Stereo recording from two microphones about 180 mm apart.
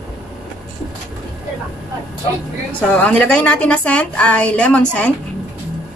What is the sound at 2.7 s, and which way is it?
A woman's voice, 5° left (ahead or behind).